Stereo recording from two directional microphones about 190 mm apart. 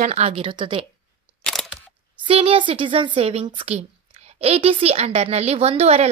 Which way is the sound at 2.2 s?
30° right (ahead or behind).